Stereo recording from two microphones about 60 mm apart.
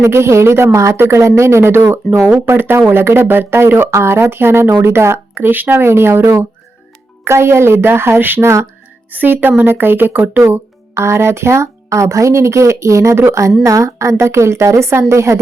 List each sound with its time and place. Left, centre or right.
0.0 s a woman's voice: right
2.0 s speech: centre
2.5 s a woman's voice: right
8.4 s a woman's voice: right
9.0 s speech: right
10.9 s a woman's voice: right